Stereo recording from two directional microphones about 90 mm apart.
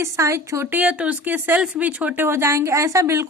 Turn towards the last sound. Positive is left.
turn(degrees=-35)  # may be behind; listen again after turning